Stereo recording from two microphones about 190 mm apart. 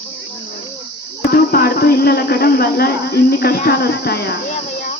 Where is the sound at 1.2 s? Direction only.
55° left (ahead or behind).